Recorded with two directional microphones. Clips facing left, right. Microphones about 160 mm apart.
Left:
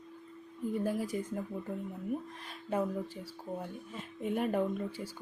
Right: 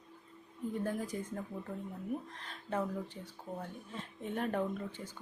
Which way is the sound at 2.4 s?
10° left (ahead or behind).